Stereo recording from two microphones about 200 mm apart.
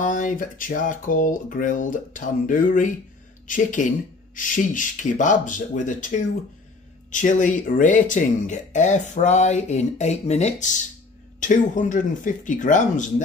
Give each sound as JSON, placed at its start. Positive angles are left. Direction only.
{"t": 0.0, "sound": "speech", "side_deg": 40}